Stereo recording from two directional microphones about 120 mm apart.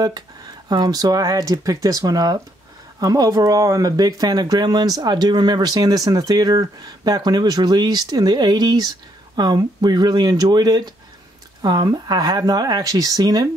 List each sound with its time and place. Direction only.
0.7 s speech: 35° right (ahead or behind)